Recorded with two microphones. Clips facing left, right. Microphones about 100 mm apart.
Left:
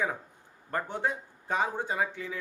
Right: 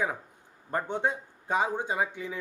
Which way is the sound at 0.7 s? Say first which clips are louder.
Right 2 dB; 20° right (ahead or behind).